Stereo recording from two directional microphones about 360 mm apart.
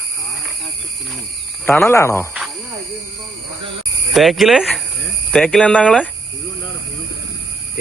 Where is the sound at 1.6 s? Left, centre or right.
Centre.